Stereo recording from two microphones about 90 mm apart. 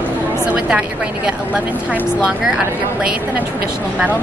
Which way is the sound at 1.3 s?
15° right (ahead or behind).